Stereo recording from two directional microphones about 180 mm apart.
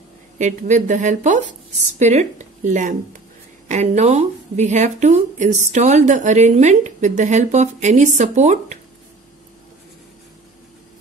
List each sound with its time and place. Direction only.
0.4 s speech: 40° right (ahead or behind)